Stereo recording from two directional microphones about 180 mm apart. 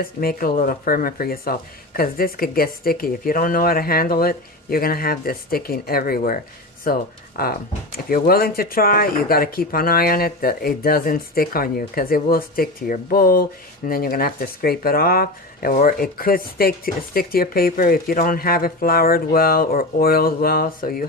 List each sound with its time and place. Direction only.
0.0 s speech: 55° left (ahead or behind)